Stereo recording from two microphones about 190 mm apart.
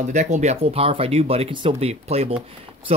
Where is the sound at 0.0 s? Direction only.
40° right (ahead or behind).